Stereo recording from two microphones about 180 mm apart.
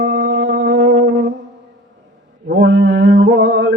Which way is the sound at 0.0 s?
70° right (ahead or behind).